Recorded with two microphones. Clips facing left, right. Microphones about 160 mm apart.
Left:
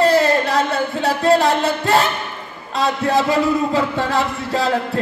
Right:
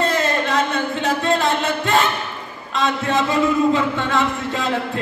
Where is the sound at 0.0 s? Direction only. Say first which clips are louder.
Left 5 dB; 40° left (ahead or behind).